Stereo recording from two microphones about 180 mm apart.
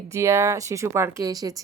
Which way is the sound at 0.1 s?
15° right (ahead or behind).